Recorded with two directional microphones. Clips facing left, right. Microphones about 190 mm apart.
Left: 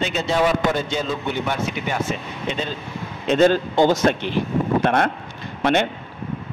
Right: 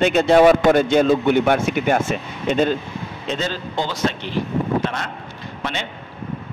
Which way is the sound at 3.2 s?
55° left (ahead or behind).